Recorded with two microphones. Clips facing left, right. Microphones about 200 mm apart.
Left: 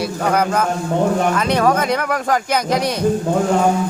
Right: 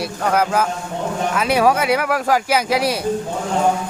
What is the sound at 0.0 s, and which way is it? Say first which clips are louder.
A man's voice: left 1 dB; centre (ahead or behind).